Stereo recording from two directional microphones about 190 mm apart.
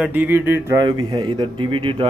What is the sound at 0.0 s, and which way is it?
Speech, 10° right (ahead or behind).